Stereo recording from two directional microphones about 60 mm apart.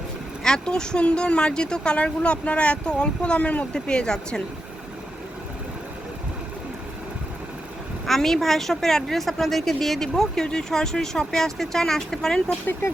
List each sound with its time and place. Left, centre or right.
0.4 s speech: centre
8.0 s a woman's voice: centre